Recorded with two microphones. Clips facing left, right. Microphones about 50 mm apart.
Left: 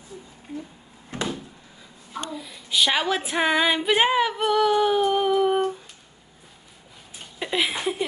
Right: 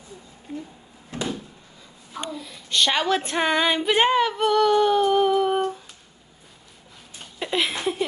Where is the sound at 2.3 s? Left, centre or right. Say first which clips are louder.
Even; centre.